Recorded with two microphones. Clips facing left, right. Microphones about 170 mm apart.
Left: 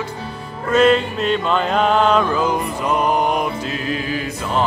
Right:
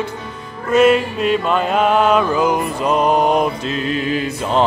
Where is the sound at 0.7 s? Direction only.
10° right (ahead or behind); by 4.2 s 25° right (ahead or behind).